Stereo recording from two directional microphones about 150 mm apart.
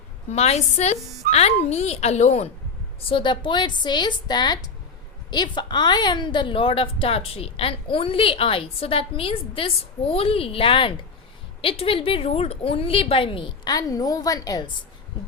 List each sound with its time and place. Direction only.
0.3 s a woman's voice: 45° left (ahead or behind)
3.0 s a woman's voice: 35° left (ahead or behind)